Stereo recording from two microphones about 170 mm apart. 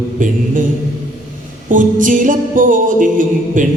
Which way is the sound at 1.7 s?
50° right (ahead or behind).